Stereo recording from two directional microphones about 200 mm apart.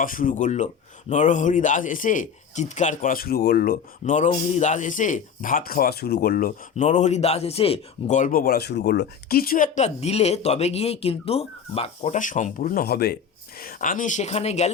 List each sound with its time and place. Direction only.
0.0 s a man's voice: 45° left (ahead or behind)